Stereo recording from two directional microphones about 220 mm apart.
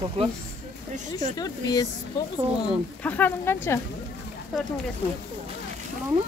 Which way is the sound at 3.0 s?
5° left (ahead or behind).